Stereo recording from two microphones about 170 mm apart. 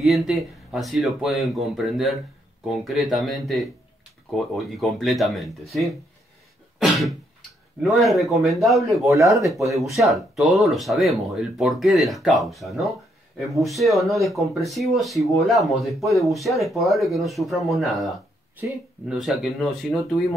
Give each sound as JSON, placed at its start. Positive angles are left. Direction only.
{"t": 0.0, "sound": "speech", "side_deg": 0}
{"t": 9.0, "sound": "speech", "side_deg": -20}
{"t": 9.3, "sound": "speech", "side_deg": 0}